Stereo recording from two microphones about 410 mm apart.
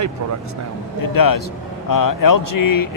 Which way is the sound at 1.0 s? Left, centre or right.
Left.